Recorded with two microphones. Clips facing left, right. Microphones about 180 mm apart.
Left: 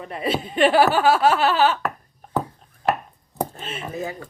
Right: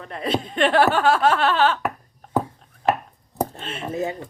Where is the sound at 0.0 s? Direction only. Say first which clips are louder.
Even; 5° left (ahead or behind).